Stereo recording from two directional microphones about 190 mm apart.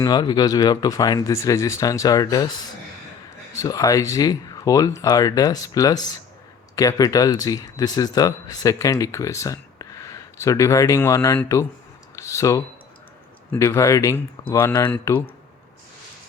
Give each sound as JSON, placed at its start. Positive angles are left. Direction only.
{"t": 0.0, "sound": "speech", "side_deg": 20}
{"t": 3.6, "sound": "speech", "side_deg": 15}